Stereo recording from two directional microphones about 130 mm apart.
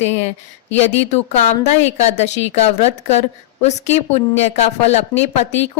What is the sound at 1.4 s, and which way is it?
Speech, 60° left (ahead or behind).